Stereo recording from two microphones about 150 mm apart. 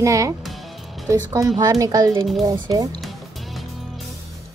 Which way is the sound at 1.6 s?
25° right (ahead or behind).